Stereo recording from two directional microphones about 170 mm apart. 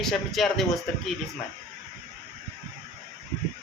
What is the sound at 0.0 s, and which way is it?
Speech, centre (ahead or behind).